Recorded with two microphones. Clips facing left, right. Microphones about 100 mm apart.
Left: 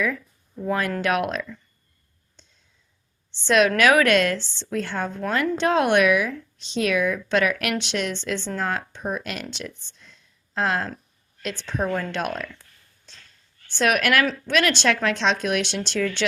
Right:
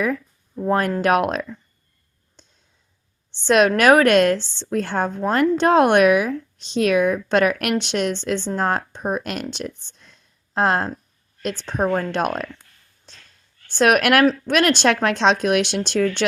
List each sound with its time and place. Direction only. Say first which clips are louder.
0.0 s speech: right 3 dB; 40° right (ahead or behind)
3.4 s speech: right 3 dB; 50° right (ahead or behind)
13.7 s speech: right 5 dB; 50° right (ahead or behind)